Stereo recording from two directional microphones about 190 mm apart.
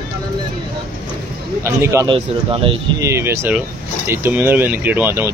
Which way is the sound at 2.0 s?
25° right (ahead or behind).